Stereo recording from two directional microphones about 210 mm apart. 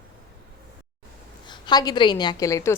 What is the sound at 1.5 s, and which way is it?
A woman's voice, 20° left (ahead or behind).